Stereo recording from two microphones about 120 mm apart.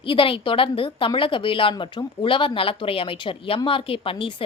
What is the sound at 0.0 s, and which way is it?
Speech, 45° left (ahead or behind).